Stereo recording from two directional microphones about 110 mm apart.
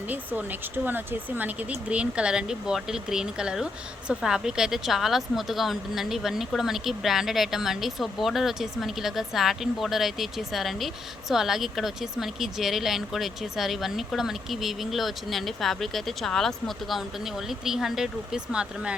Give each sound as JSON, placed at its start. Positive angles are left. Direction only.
{"t": 0.1, "sound": "speech", "side_deg": -15}